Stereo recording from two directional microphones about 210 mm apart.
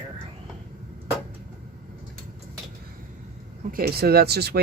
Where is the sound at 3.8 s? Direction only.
50° right (ahead or behind).